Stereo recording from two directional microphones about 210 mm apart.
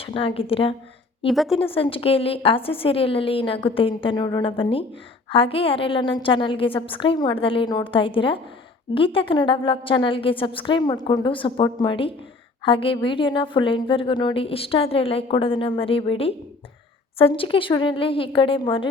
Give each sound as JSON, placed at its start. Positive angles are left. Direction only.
{"t": 0.0, "sound": "a woman's voice", "side_deg": 25}
{"t": 1.3, "sound": "speech", "side_deg": 0}
{"t": 1.7, "sound": "a woman's voice", "side_deg": 25}